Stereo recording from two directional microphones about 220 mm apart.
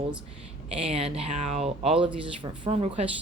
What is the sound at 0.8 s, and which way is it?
Speech, 25° right (ahead or behind).